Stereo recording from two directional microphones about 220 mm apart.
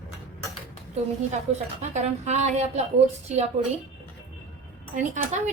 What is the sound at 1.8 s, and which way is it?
A woman's voice, 30° right (ahead or behind).